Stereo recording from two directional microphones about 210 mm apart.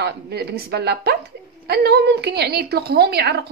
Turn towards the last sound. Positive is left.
turn(degrees=-50)  # may be behind; listen again after turning